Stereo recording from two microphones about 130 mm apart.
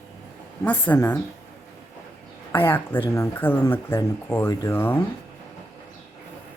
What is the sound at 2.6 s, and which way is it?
Speech, 15° left (ahead or behind).